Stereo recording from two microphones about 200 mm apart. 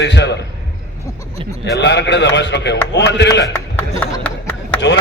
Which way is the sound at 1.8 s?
60° left (ahead or behind).